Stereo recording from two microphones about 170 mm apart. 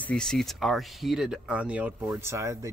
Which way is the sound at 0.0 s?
5° left (ahead or behind).